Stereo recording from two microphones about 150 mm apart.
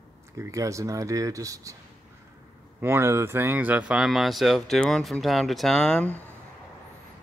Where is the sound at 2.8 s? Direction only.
15° right (ahead or behind); by 6.1 s 5° left (ahead or behind).